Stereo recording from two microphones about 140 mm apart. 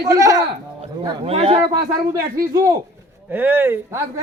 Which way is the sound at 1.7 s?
20° right (ahead or behind).